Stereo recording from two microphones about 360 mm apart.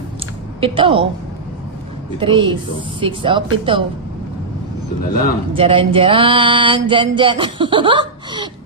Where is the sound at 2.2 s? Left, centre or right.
Centre.